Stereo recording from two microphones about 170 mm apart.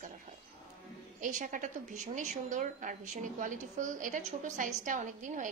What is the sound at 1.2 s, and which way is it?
A woman's voice, 50° right (ahead or behind).